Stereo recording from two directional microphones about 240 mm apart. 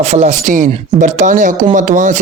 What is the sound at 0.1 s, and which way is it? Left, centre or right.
Speech, right.